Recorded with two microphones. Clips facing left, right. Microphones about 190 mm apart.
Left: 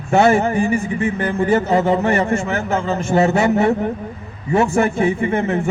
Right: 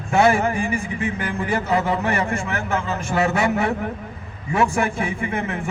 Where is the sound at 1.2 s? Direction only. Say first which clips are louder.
Left 9 dB; 25° left (ahead or behind).